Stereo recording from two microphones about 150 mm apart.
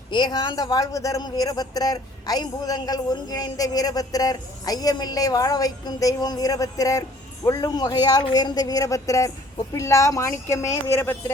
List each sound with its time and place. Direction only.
0.1 s a man's voice: 30° left (ahead or behind); by 11.2 s 15° left (ahead or behind)